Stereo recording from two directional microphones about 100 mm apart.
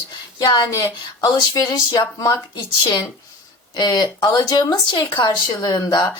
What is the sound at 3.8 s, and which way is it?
Speech, 45° left (ahead or behind).